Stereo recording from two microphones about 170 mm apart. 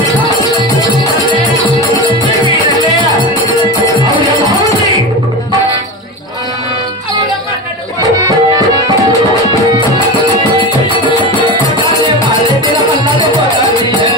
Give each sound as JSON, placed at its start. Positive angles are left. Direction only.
{"t": 8.3, "sound": "music", "side_deg": -20}